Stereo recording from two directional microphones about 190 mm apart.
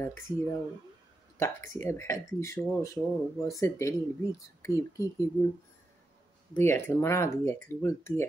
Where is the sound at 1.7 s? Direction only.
15° left (ahead or behind).